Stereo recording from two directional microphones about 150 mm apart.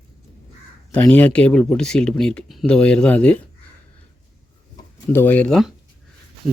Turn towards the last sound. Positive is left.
turn(degrees=5)  # may be behind; listen again after turning